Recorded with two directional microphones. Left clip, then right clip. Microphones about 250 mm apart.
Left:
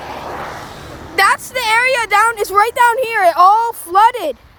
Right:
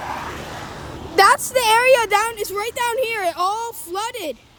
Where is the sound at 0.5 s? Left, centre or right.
Left.